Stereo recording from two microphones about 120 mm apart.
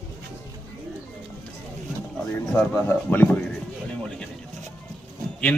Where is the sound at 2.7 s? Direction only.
15° left (ahead or behind).